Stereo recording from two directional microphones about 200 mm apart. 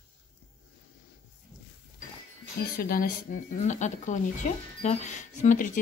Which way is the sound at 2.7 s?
45° left (ahead or behind).